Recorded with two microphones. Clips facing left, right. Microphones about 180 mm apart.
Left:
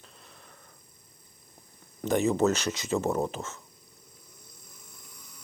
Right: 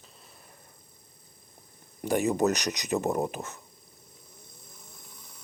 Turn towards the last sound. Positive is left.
turn(degrees=-15)  # may be behind; listen again after turning